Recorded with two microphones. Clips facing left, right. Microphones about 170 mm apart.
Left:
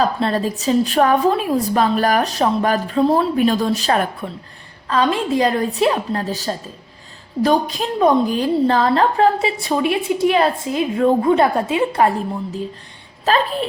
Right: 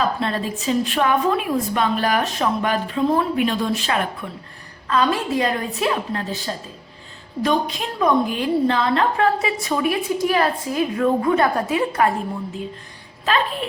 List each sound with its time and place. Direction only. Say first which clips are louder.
0.0 s a woman's voice: left 4 dB; 40° left (ahead or behind)
4.9 s a woman's voice: left 2 dB; 30° left (ahead or behind)